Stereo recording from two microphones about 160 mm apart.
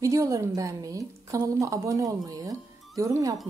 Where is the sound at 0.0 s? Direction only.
20° right (ahead or behind).